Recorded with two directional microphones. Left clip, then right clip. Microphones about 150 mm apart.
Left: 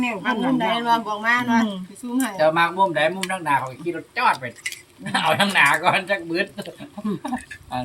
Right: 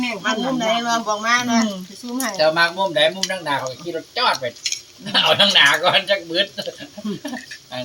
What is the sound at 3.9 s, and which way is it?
Speech, 5° right (ahead or behind).